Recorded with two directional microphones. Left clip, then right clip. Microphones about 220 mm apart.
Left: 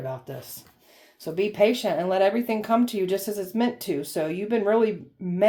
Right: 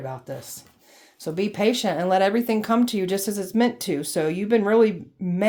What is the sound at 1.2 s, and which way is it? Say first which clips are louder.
Speech: left 1 dB; 40° right (ahead or behind).